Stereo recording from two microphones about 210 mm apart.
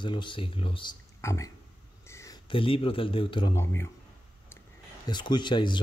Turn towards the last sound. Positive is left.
turn(degrees=20)  # may be behind; listen again after turning